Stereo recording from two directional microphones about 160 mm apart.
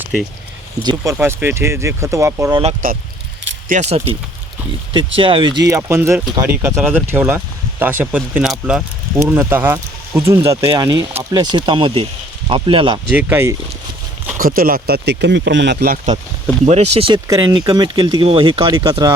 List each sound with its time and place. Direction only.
0.8 s speech: 25° right (ahead or behind)
1.1 s speech: 15° right (ahead or behind)
2.8 s speech: 60° right (ahead or behind)
3.7 s speech: 45° right (ahead or behind)
5.6 s speech: 20° right (ahead or behind)
13.1 s speech: 15° right (ahead or behind)
14.3 s speech: 60° right (ahead or behind); by 16.0 s 80° right
16.6 s speech: 40° right (ahead or behind)
17.2 s speech: 25° right (ahead or behind)